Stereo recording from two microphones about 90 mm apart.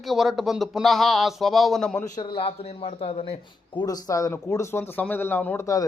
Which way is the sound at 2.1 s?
50° left (ahead or behind).